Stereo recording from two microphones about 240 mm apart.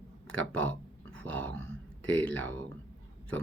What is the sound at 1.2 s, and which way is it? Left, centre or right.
Speech, centre.